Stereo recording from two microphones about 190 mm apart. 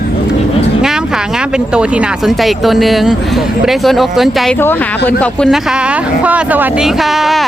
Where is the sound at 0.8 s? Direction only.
5° right (ahead or behind).